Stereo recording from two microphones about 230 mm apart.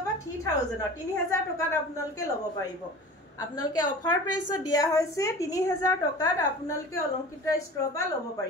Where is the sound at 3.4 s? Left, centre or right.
Centre.